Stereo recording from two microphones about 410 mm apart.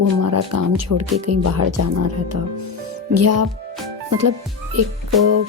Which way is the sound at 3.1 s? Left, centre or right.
Right.